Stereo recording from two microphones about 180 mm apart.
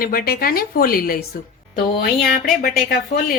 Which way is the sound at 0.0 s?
55° left (ahead or behind).